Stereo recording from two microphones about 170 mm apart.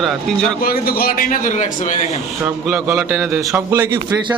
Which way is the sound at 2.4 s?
5° right (ahead or behind).